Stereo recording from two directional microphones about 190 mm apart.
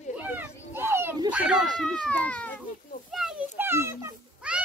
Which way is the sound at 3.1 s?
5° right (ahead or behind).